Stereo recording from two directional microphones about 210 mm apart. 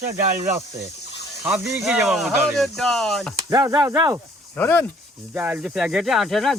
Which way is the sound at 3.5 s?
15° right (ahead or behind).